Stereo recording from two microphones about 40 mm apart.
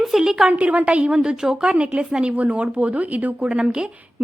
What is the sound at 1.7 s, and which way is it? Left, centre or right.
A woman's voice, right.